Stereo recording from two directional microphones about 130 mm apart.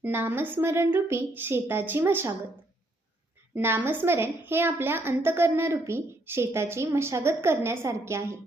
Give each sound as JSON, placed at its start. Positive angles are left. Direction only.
{"t": 0.0, "sound": "a woman's voice", "side_deg": -15}
{"t": 3.5, "sound": "a woman's voice", "side_deg": -15}